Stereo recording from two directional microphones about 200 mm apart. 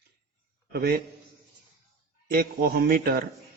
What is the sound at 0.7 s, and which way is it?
Speech, 50° right (ahead or behind).